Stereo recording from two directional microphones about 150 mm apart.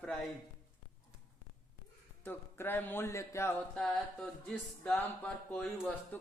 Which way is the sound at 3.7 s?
5° left (ahead or behind).